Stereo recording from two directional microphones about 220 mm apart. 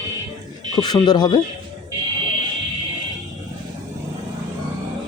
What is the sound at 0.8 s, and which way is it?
Speech, 20° left (ahead or behind).